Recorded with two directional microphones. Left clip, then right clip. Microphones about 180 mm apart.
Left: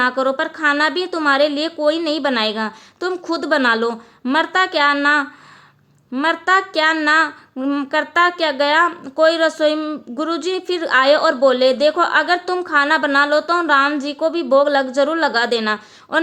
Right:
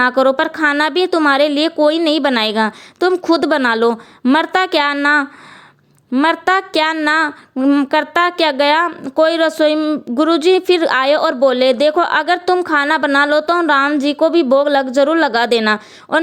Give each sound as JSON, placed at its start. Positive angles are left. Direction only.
{"t": 0.0, "sound": "a woman's voice", "side_deg": -45}
{"t": 7.5, "sound": "a woman's voice", "side_deg": -30}